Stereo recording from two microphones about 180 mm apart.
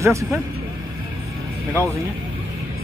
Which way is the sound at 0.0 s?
15° right (ahead or behind).